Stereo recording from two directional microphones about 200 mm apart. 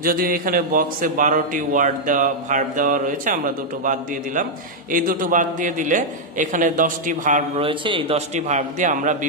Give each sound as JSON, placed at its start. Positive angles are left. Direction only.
{"t": 0.0, "sound": "a man's voice", "side_deg": -45}
{"t": 7.6, "sound": "a man's voice", "side_deg": -25}
{"t": 8.4, "sound": "a man's voice", "side_deg": -35}